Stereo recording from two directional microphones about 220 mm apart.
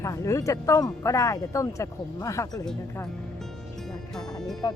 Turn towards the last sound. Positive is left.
turn(degrees=0)  # may be behind; listen again after turning